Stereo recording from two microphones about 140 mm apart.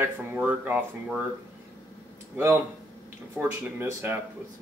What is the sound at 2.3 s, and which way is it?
Speech, 15° right (ahead or behind).